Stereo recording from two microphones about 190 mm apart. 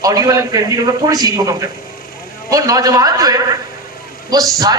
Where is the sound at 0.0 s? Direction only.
20° right (ahead or behind).